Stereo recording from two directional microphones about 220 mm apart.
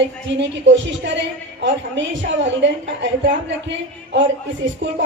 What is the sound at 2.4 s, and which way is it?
Speech, 55° right (ahead or behind).